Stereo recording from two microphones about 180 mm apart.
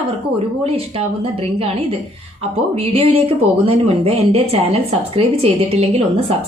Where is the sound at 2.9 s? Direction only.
30° right (ahead or behind).